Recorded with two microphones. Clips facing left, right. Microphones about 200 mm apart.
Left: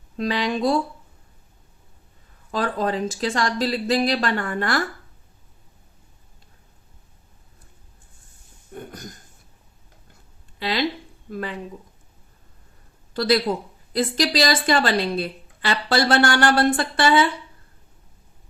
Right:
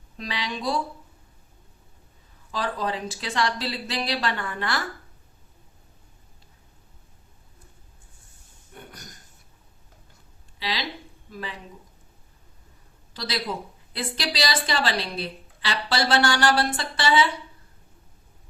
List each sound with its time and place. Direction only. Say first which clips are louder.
0.3 s a woman's voice: left 7 dB; 50° left (ahead or behind)
2.5 s a woman's voice: left 5 dB; 50° left (ahead or behind)
8.7 s a sound: left 8 dB; 45° left (ahead or behind)
10.6 s speech: left 7 dB; 55° left (ahead or behind)
13.1 s a woman's voice: left 10 dB; 50° left (ahead or behind)